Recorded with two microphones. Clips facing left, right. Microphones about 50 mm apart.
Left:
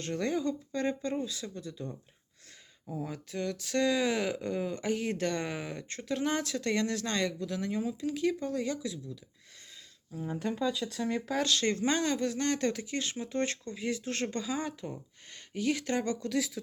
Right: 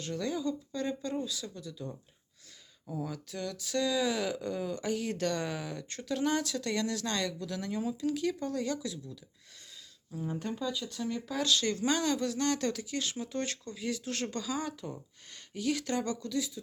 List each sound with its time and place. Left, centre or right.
0.0 s speech: left
2.8 s speech: left
3.1 s speech: left
10.3 s speech: centre
11.1 s speech: left